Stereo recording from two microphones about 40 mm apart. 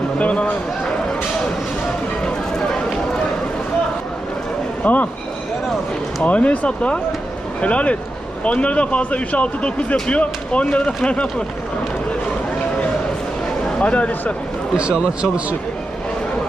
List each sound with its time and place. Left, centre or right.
0.2 s speech: left
2.5 s run: centre
4.8 s speech: left
6.2 s speech: left
13.7 s a man's voice: left
14.8 s speech: right